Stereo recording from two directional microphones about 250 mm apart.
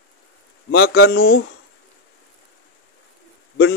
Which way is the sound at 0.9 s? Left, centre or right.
Left.